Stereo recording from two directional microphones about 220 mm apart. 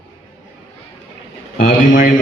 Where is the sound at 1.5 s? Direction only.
35° left (ahead or behind).